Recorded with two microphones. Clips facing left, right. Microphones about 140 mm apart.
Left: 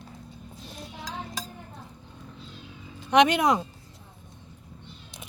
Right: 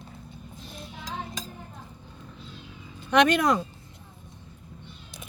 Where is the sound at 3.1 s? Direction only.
20° left (ahead or behind).